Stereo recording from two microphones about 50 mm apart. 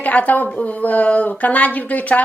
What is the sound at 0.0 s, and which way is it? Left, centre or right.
A woman's voice, left.